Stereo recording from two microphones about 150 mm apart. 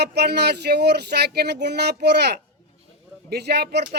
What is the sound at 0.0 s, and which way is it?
Speech, 90° right.